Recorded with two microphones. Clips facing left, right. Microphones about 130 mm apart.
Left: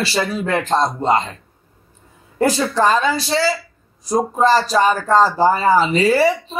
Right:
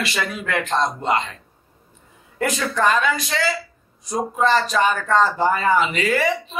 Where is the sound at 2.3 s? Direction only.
30° left (ahead or behind).